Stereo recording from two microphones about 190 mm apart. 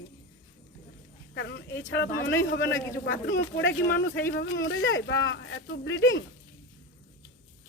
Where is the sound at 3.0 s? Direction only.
70° left (ahead or behind).